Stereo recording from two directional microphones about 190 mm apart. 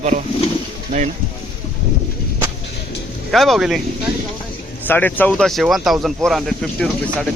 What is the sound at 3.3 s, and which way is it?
Speech, centre (ahead or behind).